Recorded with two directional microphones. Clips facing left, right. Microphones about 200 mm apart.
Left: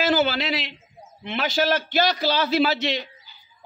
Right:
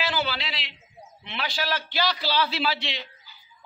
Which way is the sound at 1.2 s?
45° left (ahead or behind).